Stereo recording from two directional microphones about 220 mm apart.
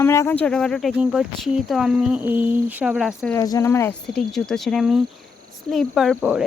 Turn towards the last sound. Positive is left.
turn(degrees=-5)  # may be behind; listen again after turning